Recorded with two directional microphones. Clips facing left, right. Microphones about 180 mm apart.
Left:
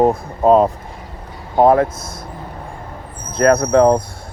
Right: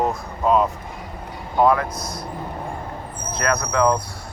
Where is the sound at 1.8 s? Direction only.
25° left (ahead or behind).